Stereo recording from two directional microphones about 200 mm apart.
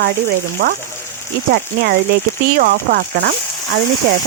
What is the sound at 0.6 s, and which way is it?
Speech, 50° right (ahead or behind).